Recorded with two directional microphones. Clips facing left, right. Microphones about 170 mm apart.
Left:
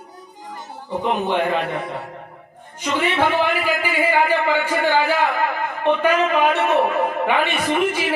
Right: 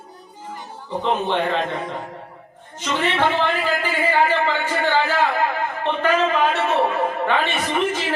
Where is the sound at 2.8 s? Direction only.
10° left (ahead or behind).